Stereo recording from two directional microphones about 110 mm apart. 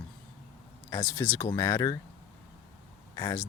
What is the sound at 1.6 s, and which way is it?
Speech, 35° left (ahead or behind).